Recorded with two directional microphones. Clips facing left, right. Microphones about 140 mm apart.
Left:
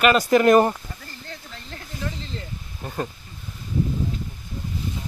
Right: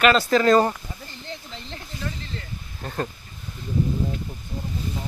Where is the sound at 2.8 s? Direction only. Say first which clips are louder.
Even; 10° left (ahead or behind).